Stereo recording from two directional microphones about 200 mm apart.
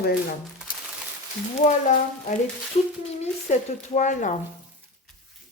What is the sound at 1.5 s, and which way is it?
Speech, 40° left (ahead or behind).